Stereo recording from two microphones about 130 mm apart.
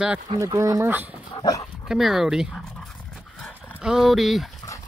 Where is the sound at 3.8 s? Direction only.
5° right (ahead or behind).